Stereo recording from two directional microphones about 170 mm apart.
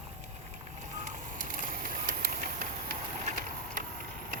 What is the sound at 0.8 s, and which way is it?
Vehicle, 45° right (ahead or behind).